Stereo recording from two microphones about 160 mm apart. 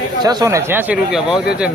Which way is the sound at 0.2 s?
25° right (ahead or behind).